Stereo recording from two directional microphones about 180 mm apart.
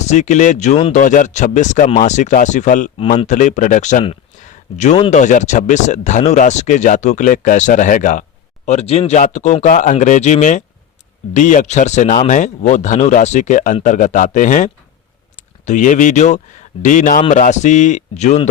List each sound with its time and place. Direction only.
0.0 s speech: 40° left (ahead or behind)
1.0 s speech: 45° left (ahead or behind)
4.0 s a sound: 35° left (ahead or behind)
5.1 s speech: 40° left (ahead or behind)